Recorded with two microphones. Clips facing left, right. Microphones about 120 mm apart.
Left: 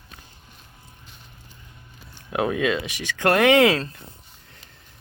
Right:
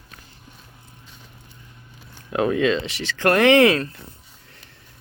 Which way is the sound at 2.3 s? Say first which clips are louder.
Right 3 dB; 15° left (ahead or behind).